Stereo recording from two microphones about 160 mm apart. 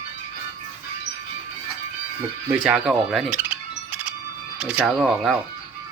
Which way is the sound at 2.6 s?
5° right (ahead or behind).